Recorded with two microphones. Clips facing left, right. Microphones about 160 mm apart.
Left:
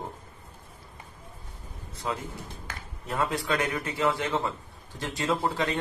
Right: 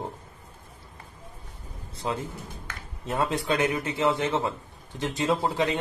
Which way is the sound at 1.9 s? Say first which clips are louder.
Right 2 dB; 30° right (ahead or behind).